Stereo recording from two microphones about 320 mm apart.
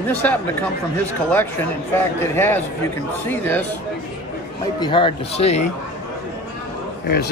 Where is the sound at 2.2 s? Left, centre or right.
Centre.